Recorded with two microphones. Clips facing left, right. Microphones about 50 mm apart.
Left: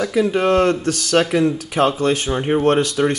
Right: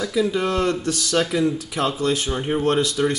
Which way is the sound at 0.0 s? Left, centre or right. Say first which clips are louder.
Left 4 dB; left.